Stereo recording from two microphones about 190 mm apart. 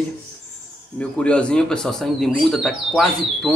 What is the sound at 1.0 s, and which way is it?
A man's voice, 5° left (ahead or behind).